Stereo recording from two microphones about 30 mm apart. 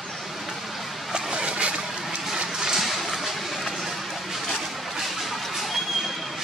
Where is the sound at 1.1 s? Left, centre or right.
Right.